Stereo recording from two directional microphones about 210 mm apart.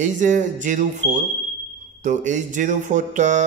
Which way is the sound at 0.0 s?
35° right (ahead or behind).